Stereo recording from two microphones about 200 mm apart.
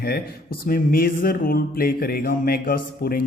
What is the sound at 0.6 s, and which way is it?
Speech, 45° left (ahead or behind).